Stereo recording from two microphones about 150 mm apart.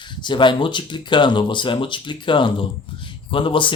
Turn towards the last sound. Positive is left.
turn(degrees=35)  # may be behind; listen again after turning